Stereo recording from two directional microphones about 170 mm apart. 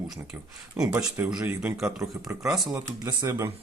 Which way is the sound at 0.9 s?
10° right (ahead or behind).